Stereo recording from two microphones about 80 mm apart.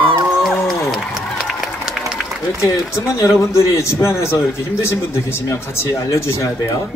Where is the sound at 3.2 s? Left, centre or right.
Left.